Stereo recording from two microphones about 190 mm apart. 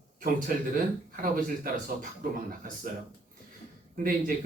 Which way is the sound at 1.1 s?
45° right (ahead or behind).